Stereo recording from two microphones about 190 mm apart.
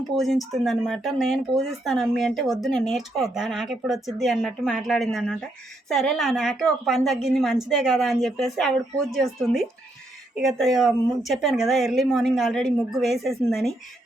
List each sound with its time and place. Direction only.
0.2 s speech: centre (ahead or behind)